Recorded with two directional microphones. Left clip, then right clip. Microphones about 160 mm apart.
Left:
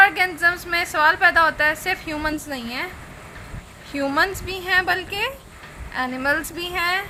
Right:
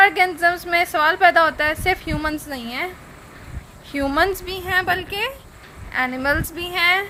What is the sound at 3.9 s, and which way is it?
Speech, 40° right (ahead or behind).